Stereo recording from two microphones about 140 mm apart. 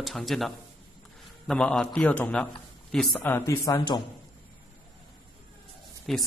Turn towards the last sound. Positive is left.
turn(degrees=0)  # may be behind; listen again after turning